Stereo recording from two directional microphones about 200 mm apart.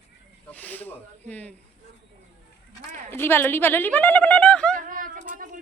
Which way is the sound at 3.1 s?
10° left (ahead or behind).